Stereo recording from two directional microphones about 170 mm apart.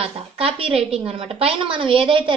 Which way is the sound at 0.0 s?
35° right (ahead or behind).